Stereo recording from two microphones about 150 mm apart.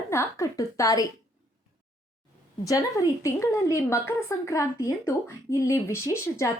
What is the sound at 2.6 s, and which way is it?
A woman's voice, 25° left (ahead or behind).